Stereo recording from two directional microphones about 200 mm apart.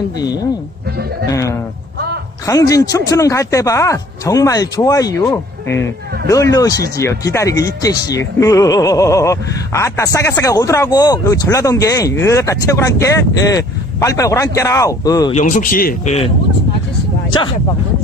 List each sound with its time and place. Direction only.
0.2 s speech: 20° left (ahead or behind)
15.3 s speech: 40° left (ahead or behind)